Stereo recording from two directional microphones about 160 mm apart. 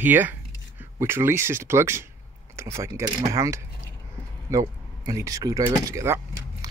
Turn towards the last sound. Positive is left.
turn(degrees=-20)  # may be behind; listen again after turning